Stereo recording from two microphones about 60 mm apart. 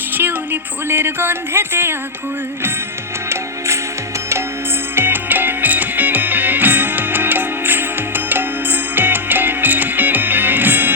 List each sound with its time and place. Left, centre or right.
0.1 s speech: right
4.9 s music: right